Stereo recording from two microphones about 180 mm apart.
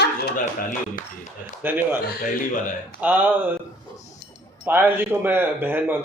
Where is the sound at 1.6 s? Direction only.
10° right (ahead or behind).